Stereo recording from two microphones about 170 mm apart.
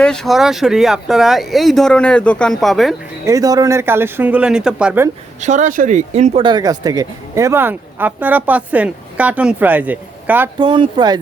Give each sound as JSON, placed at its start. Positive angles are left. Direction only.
{"t": 0.0, "sound": "speech", "side_deg": 5}
{"t": 3.2, "sound": "speech", "side_deg": -20}
{"t": 5.4, "sound": "speech", "side_deg": -45}
{"t": 6.4, "sound": "speech", "side_deg": -25}
{"t": 10.6, "sound": "speech", "side_deg": -30}